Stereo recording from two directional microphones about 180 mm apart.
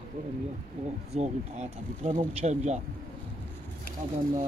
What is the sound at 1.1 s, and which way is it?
Speech, 40° right (ahead or behind).